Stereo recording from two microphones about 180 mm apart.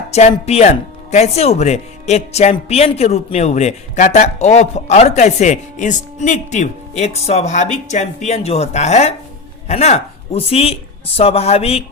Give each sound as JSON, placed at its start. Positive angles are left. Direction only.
{"t": 0.1, "sound": "speech", "side_deg": 35}